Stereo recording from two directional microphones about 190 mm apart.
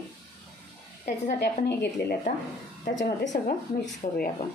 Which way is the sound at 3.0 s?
40° left (ahead or behind).